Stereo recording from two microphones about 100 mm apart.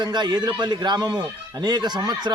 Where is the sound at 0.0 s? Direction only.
45° right (ahead or behind).